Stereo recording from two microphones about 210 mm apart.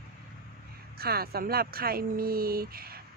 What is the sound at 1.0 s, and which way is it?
Speech, 45° right (ahead or behind).